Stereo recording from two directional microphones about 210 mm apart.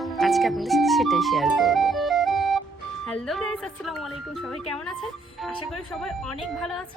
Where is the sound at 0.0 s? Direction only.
Centre (ahead or behind).